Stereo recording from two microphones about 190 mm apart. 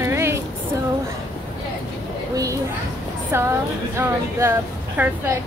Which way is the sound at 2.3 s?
20° right (ahead or behind).